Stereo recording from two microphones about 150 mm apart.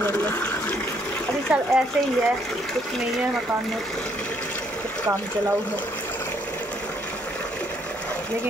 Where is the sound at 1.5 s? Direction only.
5° right (ahead or behind).